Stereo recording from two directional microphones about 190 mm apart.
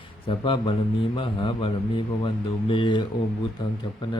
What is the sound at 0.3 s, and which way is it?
A man's voice, 25° left (ahead or behind).